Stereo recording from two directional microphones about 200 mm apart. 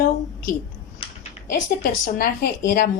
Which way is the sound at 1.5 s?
45° left (ahead or behind).